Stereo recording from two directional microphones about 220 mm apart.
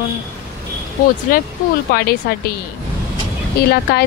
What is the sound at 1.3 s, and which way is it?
Speech, 40° left (ahead or behind).